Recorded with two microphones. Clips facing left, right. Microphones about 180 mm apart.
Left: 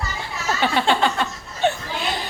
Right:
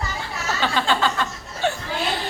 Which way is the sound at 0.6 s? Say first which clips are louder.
Left 2 dB; 20° left (ahead or behind).